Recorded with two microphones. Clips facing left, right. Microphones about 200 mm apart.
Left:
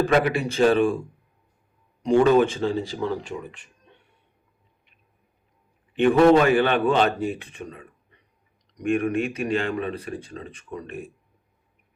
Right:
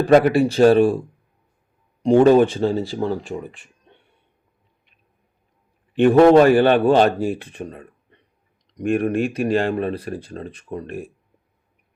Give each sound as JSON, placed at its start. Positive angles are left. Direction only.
{"t": 0.0, "sound": "speech", "side_deg": -45}
{"t": 2.0, "sound": "speech", "side_deg": -30}
{"t": 6.0, "sound": "speech", "side_deg": -40}
{"t": 8.9, "sound": "speech", "side_deg": -35}